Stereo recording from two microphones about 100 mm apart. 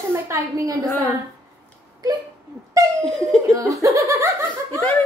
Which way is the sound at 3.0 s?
5° left (ahead or behind).